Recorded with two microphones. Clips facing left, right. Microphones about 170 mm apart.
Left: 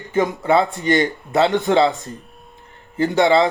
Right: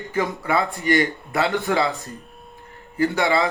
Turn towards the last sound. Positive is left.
turn(degrees=20)  # may be behind; listen again after turning